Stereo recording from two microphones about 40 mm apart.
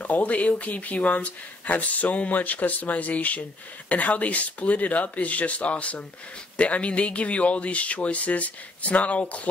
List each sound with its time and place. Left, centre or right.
0.0 s speech: left